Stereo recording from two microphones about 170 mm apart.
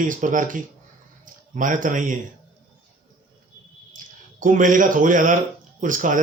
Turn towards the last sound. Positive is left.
turn(degrees=-50)  # may be behind; listen again after turning